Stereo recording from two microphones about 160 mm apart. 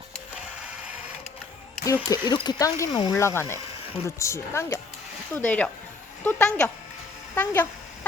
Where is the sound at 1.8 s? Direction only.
20° left (ahead or behind).